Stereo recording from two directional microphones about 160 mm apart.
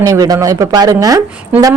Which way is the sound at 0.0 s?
25° right (ahead or behind).